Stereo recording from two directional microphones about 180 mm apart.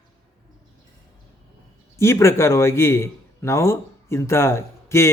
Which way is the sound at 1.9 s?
15° left (ahead or behind).